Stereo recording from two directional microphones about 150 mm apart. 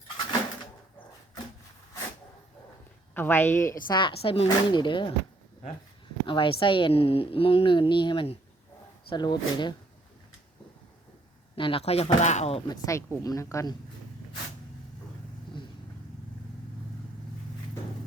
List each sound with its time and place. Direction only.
3.2 s speech: 15° left (ahead or behind)
3.8 s a woman's voice: 30° left (ahead or behind)
6.2 s a woman's voice: 35° left (ahead or behind)
11.5 s a woman's voice: 35° left (ahead or behind)
12.6 s speech: 20° left (ahead or behind)